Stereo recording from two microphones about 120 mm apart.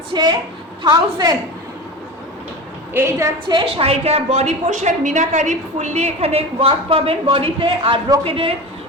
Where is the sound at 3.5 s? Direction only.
40° right (ahead or behind).